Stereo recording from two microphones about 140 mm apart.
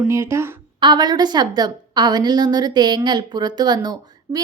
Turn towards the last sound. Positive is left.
turn(degrees=-30)  # may be behind; listen again after turning